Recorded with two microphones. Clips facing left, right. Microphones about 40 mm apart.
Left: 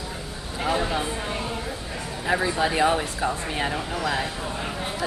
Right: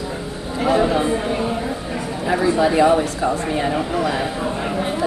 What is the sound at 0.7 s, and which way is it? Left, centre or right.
Speech, centre.